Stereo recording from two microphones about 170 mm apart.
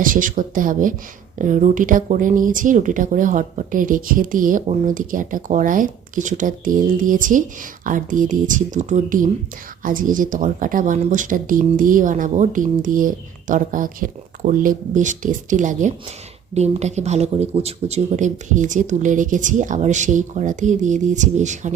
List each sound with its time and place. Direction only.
0.0 s speech: 50° right (ahead or behind)